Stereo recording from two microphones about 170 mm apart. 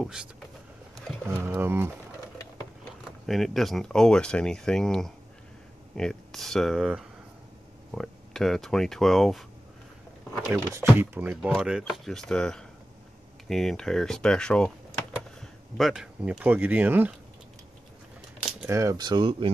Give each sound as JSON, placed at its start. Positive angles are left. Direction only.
{"t": 0.0, "sound": "speech", "side_deg": -5}
{"t": 1.4, "sound": "speech", "side_deg": -15}
{"t": 3.3, "sound": "speech", "side_deg": 0}
{"t": 10.7, "sound": "speech", "side_deg": -15}
{"t": 18.4, "sound": "speech", "side_deg": -10}